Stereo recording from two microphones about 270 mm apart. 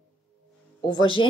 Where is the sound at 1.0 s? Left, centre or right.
Centre.